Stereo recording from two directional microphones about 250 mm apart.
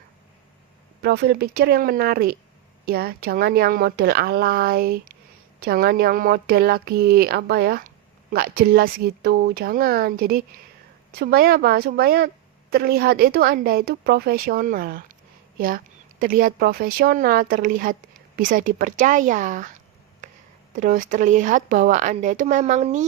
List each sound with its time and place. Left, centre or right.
1.0 s speech: right
20.2 s a sound: right
20.7 s speech: right